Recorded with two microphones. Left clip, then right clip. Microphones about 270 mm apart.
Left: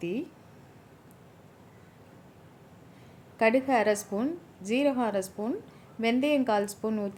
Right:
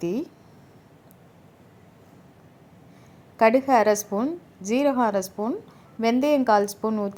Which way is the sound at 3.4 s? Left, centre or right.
Centre.